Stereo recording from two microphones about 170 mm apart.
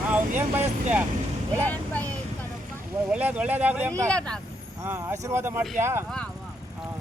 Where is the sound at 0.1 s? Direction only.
10° right (ahead or behind).